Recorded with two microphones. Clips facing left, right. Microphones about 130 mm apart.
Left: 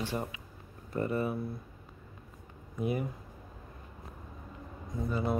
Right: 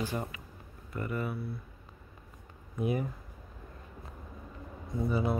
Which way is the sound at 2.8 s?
Centre (ahead or behind).